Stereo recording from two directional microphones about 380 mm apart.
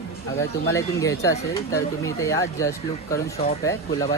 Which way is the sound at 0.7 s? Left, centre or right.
Centre.